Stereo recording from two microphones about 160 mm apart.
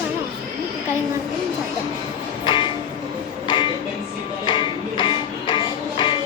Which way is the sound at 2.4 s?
30° left (ahead or behind).